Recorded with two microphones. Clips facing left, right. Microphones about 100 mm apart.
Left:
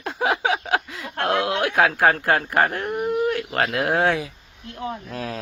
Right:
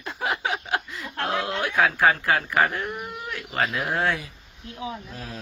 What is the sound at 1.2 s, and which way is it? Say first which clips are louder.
Speech: left 5 dB; 70° left (ahead or behind).